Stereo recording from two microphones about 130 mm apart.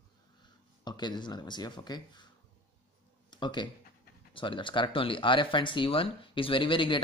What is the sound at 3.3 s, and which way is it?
Speech, 35° left (ahead or behind).